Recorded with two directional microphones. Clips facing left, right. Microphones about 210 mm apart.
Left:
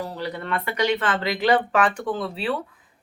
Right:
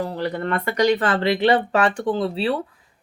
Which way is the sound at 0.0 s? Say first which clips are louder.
Right 5 dB; 50° right (ahead or behind).